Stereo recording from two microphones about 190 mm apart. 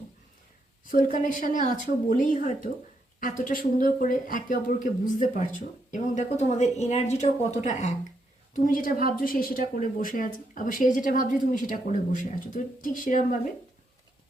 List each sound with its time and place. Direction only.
0.9 s speech: 45° left (ahead or behind)